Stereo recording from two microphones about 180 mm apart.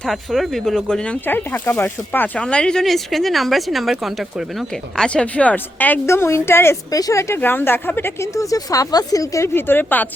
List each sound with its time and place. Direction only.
0.0 s speech: centre (ahead or behind)